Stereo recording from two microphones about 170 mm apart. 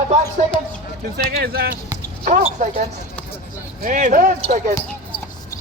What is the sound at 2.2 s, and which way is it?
Speech, 45° right (ahead or behind).